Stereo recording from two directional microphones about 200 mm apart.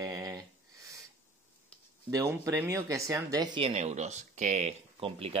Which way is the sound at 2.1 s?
15° right (ahead or behind).